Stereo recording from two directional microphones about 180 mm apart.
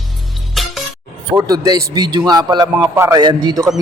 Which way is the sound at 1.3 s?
20° right (ahead or behind).